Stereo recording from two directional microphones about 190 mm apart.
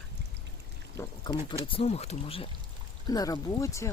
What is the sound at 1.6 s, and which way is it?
Speech, 30° left (ahead or behind).